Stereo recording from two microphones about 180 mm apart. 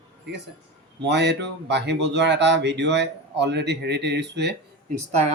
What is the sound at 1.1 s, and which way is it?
Speech, 70° right (ahead or behind).